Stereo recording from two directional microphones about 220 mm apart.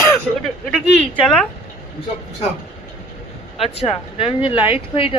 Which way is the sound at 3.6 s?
25° left (ahead or behind).